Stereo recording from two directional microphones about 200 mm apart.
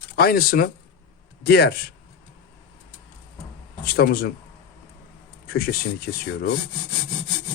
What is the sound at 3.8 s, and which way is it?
Speech, 50° left (ahead or behind).